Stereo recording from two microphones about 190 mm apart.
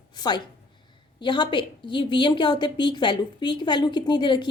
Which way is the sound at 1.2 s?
25° left (ahead or behind).